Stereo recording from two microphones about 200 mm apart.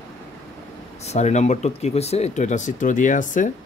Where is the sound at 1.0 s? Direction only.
35° left (ahead or behind).